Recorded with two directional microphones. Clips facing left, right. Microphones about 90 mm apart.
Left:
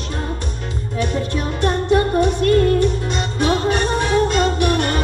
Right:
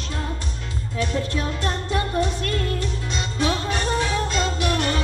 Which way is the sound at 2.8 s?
55° left (ahead or behind).